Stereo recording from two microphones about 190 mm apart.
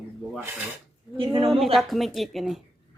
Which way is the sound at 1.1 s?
25° right (ahead or behind).